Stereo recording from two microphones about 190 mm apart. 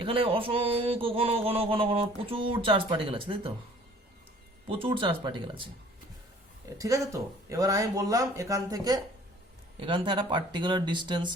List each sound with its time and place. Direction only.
0.0 s a man's voice: 30° right (ahead or behind)
4.7 s a man's voice: 30° right (ahead or behind)
6.7 s a man's voice: 15° right (ahead or behind)